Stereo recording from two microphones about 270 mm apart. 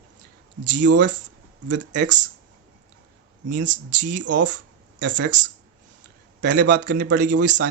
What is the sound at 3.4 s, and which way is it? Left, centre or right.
Speech, right.